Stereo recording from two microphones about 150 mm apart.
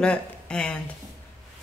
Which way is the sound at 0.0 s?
5° left (ahead or behind).